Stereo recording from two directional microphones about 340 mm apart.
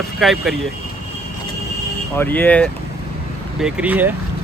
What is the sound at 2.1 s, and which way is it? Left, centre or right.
Speech, centre.